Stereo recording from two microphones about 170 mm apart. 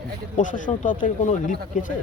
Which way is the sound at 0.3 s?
50° left (ahead or behind).